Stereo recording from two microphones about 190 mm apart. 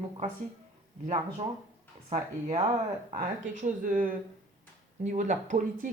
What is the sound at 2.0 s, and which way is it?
Speech, 30° right (ahead or behind).